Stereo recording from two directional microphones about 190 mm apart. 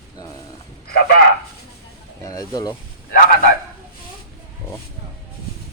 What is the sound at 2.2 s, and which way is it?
Speech, 20° left (ahead or behind).